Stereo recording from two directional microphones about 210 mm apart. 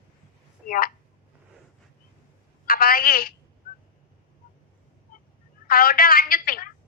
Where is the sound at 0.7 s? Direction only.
45° left (ahead or behind).